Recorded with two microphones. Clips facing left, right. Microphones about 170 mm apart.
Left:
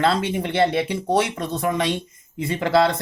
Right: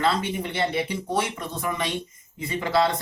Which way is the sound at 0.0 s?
65° left (ahead or behind).